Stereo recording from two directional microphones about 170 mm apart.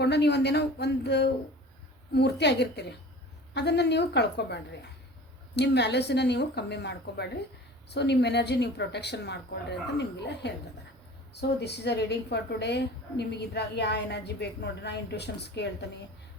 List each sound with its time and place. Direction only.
0.0 s a woman's voice: 80° left
11.3 s a woman's voice: 80° left